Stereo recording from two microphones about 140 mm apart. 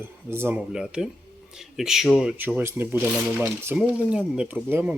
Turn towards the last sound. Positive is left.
turn(degrees=-10)  # may be behind; listen again after turning